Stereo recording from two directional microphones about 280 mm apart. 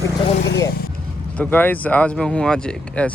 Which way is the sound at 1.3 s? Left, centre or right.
Centre.